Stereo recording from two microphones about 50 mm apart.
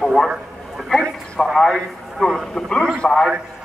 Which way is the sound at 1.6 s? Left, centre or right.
Centre.